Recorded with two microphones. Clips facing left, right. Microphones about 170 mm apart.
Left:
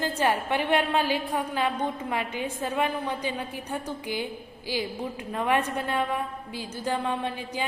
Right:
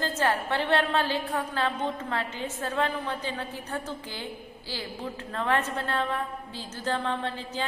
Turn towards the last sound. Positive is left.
turn(degrees=15)  # may be behind; listen again after turning